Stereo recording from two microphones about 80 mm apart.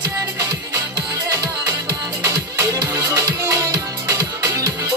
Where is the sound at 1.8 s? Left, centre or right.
Right.